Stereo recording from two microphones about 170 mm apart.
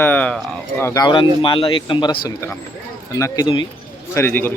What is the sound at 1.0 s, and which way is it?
Speech, 25° left (ahead or behind).